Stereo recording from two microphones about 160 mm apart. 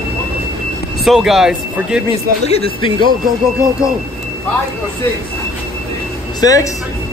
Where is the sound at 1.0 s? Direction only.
Centre (ahead or behind).